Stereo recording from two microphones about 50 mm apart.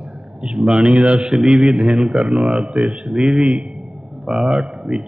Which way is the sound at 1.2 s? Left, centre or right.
Centre.